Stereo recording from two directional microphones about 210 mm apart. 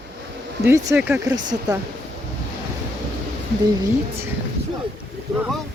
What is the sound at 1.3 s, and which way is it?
Speech, 20° right (ahead or behind).